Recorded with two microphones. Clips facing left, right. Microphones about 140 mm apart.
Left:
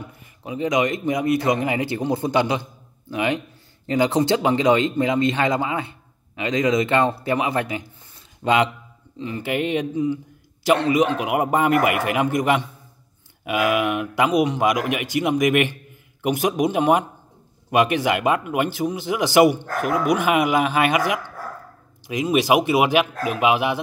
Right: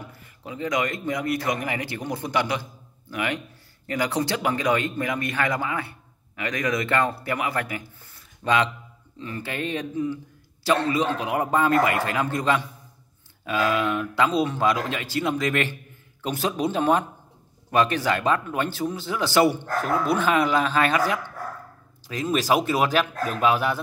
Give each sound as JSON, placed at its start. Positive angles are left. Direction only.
{"t": 0.1, "sound": "a man's voice", "side_deg": 20}